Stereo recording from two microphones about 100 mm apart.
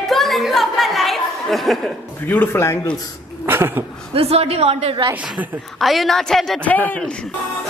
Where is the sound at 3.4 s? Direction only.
25° right (ahead or behind).